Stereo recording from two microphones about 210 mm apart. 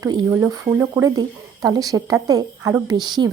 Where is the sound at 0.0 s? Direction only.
15° right (ahead or behind).